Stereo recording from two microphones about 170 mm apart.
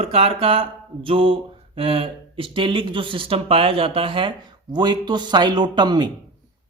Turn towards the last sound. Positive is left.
turn(degrees=-25)  # may be behind; listen again after turning